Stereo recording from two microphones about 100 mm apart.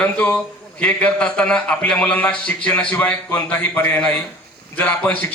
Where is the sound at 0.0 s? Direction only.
15° left (ahead or behind).